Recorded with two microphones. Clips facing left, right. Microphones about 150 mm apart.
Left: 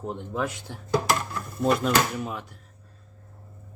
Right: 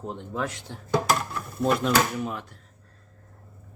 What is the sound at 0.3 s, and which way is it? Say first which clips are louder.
Speech: left 1 dB; 10° left (ahead or behind).